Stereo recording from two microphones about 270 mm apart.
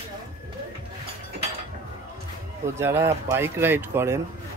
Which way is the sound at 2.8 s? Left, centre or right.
Centre.